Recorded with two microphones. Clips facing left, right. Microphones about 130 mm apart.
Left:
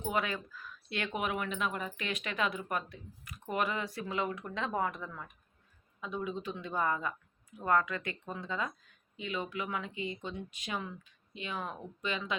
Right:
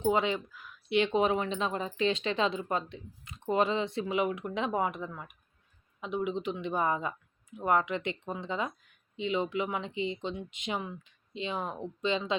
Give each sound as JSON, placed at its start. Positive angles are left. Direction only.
{"t": 0.0, "sound": "speech", "side_deg": -25}